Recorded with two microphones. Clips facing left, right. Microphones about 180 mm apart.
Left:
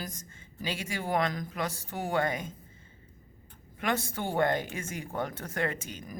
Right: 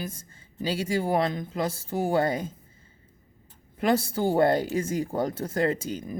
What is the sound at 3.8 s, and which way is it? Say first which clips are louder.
A man's voice: right 8 dB; 30° right (ahead or behind).